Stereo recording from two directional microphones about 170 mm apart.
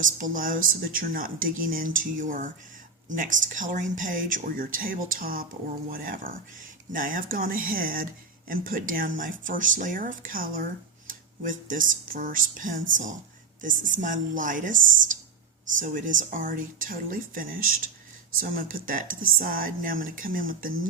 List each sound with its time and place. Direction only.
0.0 s speech: 50° right (ahead or behind)
15.8 s speech: 50° right (ahead or behind)